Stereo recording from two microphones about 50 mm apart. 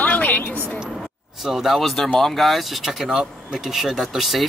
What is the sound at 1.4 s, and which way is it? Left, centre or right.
Speech, centre.